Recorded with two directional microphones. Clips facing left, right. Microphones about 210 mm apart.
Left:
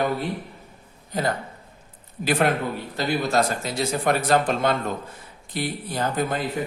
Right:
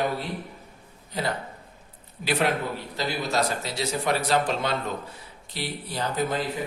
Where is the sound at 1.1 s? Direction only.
45° left (ahead or behind).